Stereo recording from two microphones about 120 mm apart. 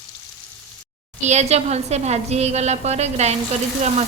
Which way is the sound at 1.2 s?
70° right (ahead or behind).